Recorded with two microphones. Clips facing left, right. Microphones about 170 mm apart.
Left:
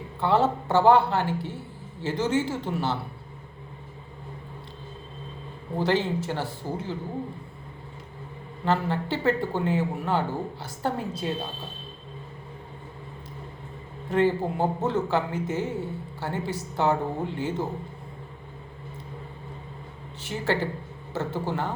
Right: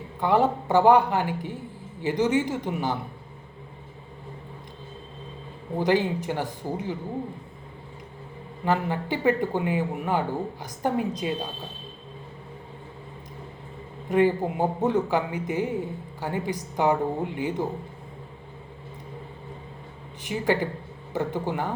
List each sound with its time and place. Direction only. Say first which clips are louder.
0.2 s a man's voice: right 1 dB; 15° right (ahead or behind)
5.7 s a man's voice: right 2 dB; 15° right (ahead or behind)
8.6 s a man's voice: even; 15° right (ahead or behind)
14.1 s a man's voice: right 2 dB; 15° right (ahead or behind)
20.2 s a man's voice: right 2 dB; 15° right (ahead or behind)